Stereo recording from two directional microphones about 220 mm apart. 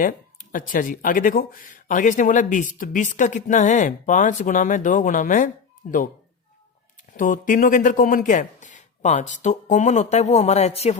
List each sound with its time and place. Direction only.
0.5 s speech: 35° left (ahead or behind)
7.2 s speech: 35° left (ahead or behind)